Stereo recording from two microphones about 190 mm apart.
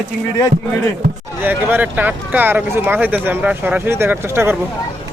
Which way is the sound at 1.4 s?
10° right (ahead or behind).